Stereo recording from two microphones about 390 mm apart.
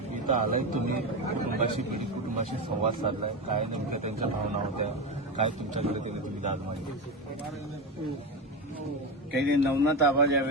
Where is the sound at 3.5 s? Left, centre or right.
Centre.